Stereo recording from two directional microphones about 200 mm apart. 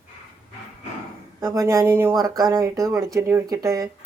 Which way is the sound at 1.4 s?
15° right (ahead or behind).